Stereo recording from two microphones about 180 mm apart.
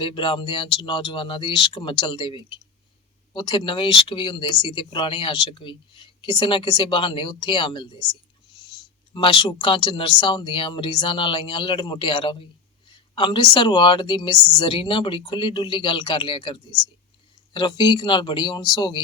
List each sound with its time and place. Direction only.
0.0 s speech: 25° left (ahead or behind)
9.1 s speech: 25° left (ahead or behind)